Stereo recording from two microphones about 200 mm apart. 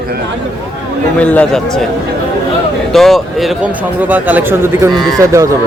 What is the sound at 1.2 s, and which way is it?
Speech, 5° left (ahead or behind).